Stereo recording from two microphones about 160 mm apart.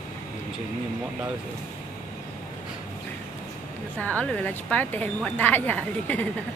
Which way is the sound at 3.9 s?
10° left (ahead or behind).